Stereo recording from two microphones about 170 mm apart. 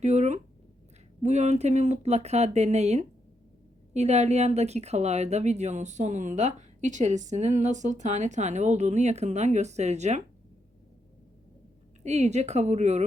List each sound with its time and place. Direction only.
0.0 s a sound: 40° right (ahead or behind)
1.2 s a woman's voice: 40° right (ahead or behind)
12.0 s speech: 40° right (ahead or behind)